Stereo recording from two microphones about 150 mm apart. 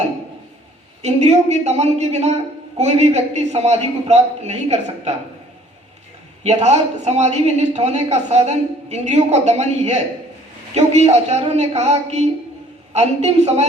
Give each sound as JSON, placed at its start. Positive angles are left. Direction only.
{"t": 1.0, "sound": "a woman's voice", "side_deg": -45}
{"t": 6.4, "sound": "a woman's voice", "side_deg": -45}